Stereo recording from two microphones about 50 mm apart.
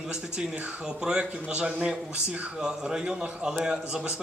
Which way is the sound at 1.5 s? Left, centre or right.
Right.